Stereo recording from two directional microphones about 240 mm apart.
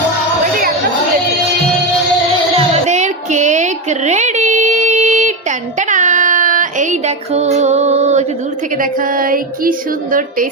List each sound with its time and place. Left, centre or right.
2.6 s child singing: right
8.8 s female singing: right